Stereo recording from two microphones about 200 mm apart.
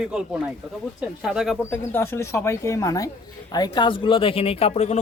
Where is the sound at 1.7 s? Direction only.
10° left (ahead or behind).